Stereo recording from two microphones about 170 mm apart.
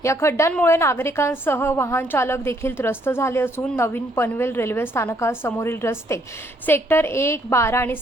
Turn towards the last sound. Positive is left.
turn(degrees=15)  # may be behind; listen again after turning